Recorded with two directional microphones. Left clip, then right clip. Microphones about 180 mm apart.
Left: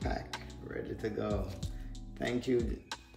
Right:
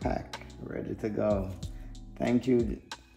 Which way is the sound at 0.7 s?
25° right (ahead or behind).